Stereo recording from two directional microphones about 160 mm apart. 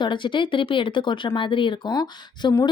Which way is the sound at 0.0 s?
30° left (ahead or behind).